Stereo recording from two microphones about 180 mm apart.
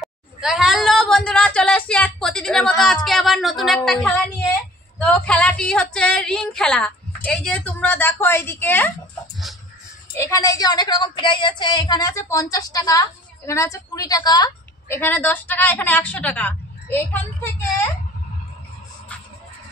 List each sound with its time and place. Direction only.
0.0 s a sound: centre (ahead or behind)
2.8 s speech: centre (ahead or behind)
10.1 s speech: 15° left (ahead or behind)
15.0 s a woman's voice: 10° left (ahead or behind)